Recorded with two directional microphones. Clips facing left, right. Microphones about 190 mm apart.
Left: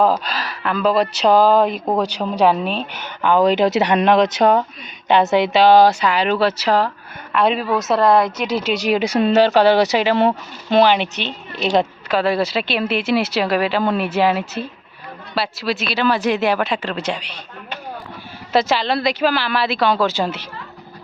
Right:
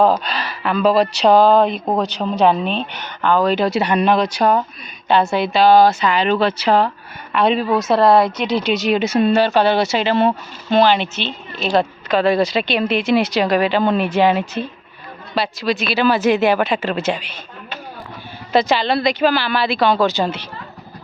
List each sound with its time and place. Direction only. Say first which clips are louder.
0.0 s speech: right 2 dB; 5° left (ahead or behind); by 11.9 s 20° left (ahead or behind)
12.0 s speech: right 2 dB; 5° left (ahead or behind)
18.5 s speech: right 1 dB; centre (ahead or behind)